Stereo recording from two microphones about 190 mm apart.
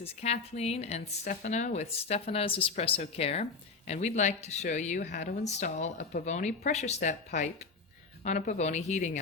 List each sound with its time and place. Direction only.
0.0 s speech: 35° left (ahead or behind)